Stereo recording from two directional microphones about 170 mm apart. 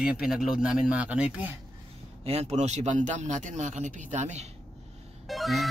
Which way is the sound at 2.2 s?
40° right (ahead or behind).